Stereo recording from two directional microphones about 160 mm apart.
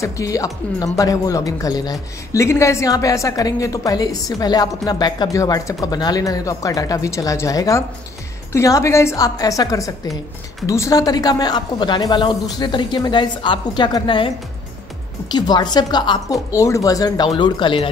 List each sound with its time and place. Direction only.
0.0 s speech: 20° left (ahead or behind)
15.3 s speech: 25° left (ahead or behind)